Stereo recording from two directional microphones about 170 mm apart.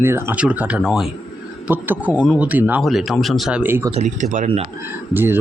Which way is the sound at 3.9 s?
40° right (ahead or behind).